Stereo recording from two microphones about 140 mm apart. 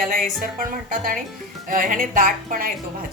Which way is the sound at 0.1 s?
85° right.